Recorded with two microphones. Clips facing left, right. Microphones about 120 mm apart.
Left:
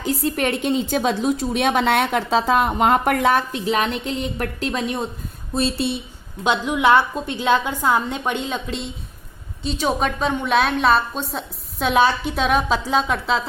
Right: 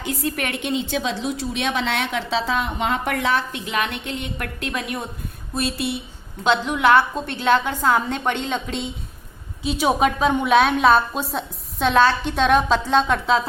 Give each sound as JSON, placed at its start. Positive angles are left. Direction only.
{"t": 0.0, "sound": "a woman's voice", "side_deg": 30}
{"t": 6.4, "sound": "a woman's voice", "side_deg": 15}